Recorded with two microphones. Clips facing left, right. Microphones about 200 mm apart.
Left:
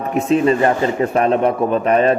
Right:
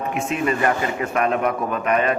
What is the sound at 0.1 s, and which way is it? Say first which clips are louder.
A man's voice: left 10 dB; 35° left (ahead or behind).